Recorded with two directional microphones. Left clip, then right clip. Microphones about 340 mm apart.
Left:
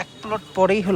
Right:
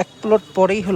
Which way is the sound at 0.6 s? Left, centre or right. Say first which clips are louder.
Right 1 dB; centre.